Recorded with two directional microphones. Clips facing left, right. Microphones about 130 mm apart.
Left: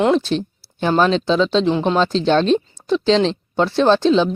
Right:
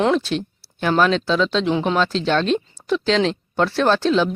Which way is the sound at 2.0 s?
30° left (ahead or behind).